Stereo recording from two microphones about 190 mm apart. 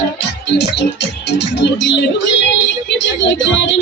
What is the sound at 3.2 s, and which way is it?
Speech, 75° left (ahead or behind).